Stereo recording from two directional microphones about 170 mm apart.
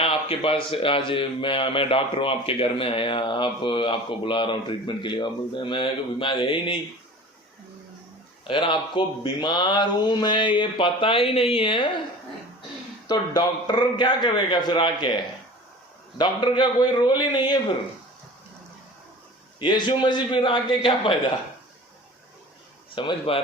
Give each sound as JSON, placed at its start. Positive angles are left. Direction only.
{"t": 0.0, "sound": "a man's voice", "side_deg": 35}
{"t": 8.4, "sound": "speech", "side_deg": 30}
{"t": 13.1, "sound": "speech", "side_deg": 25}
{"t": 19.5, "sound": "speech", "side_deg": 25}
{"t": 23.0, "sound": "a man's voice", "side_deg": 30}